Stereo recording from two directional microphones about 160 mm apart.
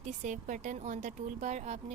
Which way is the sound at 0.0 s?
50° right (ahead or behind).